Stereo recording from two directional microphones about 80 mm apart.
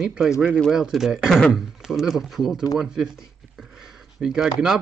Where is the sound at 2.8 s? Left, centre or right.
Centre.